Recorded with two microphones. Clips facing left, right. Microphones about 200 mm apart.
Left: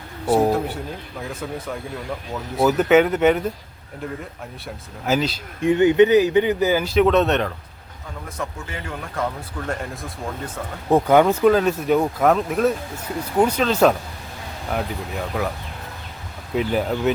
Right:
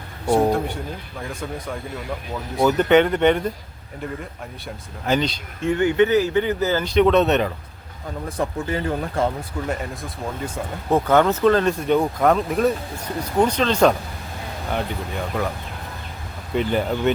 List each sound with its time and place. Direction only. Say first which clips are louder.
0.3 s speech: even; 5° left (ahead or behind)
5.0 s speech: even; 5° left (ahead or behind)
5.5 s speech: left 4 dB; 20° left (ahead or behind); by 7.5 s centre (ahead or behind)
8.4 s speech: right 7 dB; 35° right (ahead or behind)
9.6 s speech: left 1 dB; centre (ahead or behind)
10.8 s speech: left 2 dB; 15° left (ahead or behind)
16.6 s speech: even; centre (ahead or behind)